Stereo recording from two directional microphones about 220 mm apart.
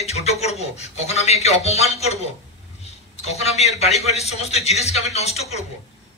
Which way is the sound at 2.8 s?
30° left (ahead or behind).